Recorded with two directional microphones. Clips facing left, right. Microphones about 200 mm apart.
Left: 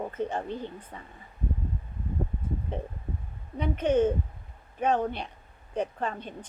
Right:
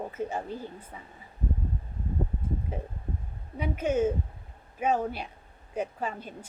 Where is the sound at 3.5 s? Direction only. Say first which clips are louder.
Left 3 dB; 5° right (ahead or behind).